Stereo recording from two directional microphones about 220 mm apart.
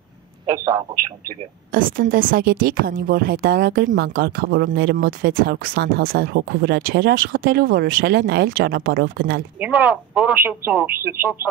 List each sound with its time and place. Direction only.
0.7 s speech: 15° right (ahead or behind)
1.7 s a woman's voice: 40° right (ahead or behind)
9.6 s speech: 10° right (ahead or behind)